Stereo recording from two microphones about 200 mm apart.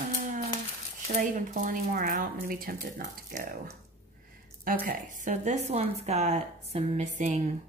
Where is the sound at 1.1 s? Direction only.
40° right (ahead or behind).